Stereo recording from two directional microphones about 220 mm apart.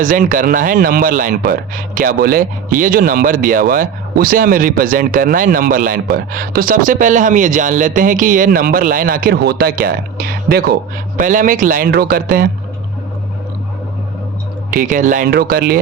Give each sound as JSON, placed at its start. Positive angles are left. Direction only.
{"t": 0.0, "sound": "speech", "side_deg": -40}
{"t": 14.7, "sound": "speech", "side_deg": -35}